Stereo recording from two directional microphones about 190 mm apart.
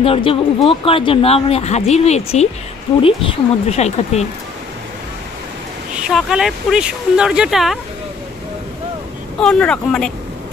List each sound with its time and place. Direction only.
0.0 s speech: 30° left (ahead or behind)
6.0 s speech: centre (ahead or behind)
9.4 s speech: 5° left (ahead or behind)